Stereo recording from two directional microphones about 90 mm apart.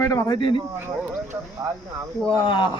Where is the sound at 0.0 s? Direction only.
40° left (ahead or behind).